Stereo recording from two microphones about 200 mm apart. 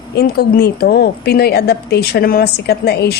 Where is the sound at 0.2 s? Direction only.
50° left (ahead or behind).